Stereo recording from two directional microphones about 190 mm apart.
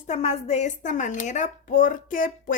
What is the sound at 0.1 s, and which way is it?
Speech, 35° left (ahead or behind).